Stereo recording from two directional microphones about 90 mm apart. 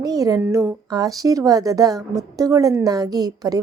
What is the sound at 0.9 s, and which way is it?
A woman's voice, 45° right (ahead or behind).